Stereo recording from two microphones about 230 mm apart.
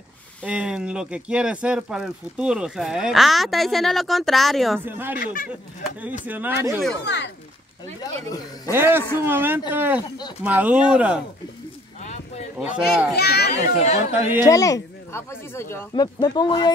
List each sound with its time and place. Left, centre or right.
0.4 s speech: centre
5.2 s speech: left
5.9 s speech: centre
7.1 s a child's voice: left
8.7 s speech: centre
12.0 s a sound: left
12.5 s speech: centre
13.1 s a child's voice: left
13.7 s speech: left
14.5 s speech: centre